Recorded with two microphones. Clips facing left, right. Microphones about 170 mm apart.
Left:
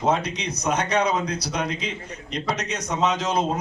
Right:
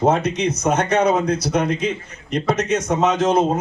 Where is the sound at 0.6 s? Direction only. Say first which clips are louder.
Right 3 dB; 50° right (ahead or behind).